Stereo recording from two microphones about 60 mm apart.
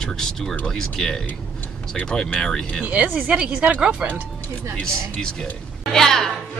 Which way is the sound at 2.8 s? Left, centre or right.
Right.